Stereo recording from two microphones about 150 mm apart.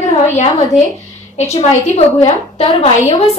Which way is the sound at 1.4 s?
45° left (ahead or behind).